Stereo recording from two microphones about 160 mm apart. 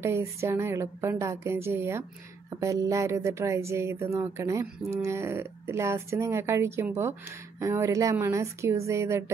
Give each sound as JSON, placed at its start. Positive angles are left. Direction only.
{"t": 0.0, "sound": "speech", "side_deg": -15}